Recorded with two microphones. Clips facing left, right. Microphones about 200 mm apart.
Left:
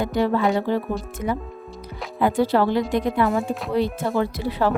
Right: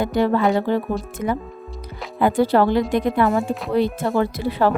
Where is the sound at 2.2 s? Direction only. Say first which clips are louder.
Right 2 dB; 50° right (ahead or behind).